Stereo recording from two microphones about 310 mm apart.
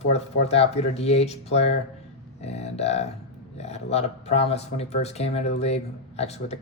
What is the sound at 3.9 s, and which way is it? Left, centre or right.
Speech, centre.